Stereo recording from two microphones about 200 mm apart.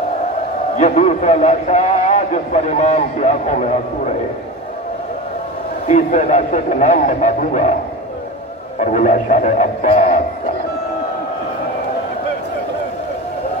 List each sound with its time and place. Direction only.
0.7 s a man's voice: 35° left (ahead or behind)
5.9 s a man's voice: 40° left (ahead or behind)
8.7 s a man's voice: 40° left (ahead or behind)